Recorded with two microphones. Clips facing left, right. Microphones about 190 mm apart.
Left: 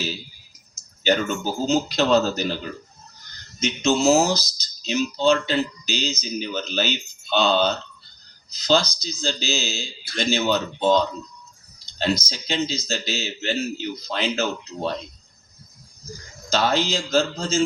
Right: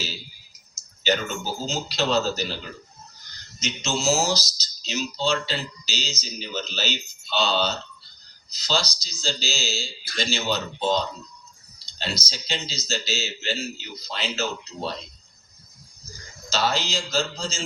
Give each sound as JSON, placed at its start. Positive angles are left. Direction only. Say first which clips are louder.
{"t": 1.0, "sound": "a man's voice", "louder": "left 4 dB", "side_deg": 55}
{"t": 3.6, "sound": "a man's voice", "louder": "left 8 dB", "side_deg": 55}
{"t": 16.5, "sound": "a man's voice", "louder": "left 4 dB", "side_deg": 50}